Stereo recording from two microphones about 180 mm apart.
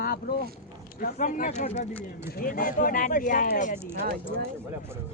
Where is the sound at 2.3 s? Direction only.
50° left (ahead or behind).